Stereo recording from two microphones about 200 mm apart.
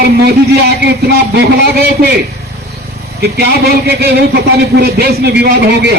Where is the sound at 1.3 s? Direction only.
55° right (ahead or behind).